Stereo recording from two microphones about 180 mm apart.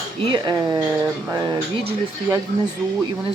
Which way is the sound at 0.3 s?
25° right (ahead or behind).